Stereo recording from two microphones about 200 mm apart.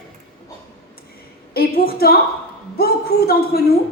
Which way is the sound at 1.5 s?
50° left (ahead or behind).